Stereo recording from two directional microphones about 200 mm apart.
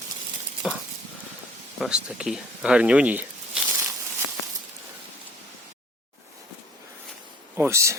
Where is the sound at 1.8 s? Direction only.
5° right (ahead or behind).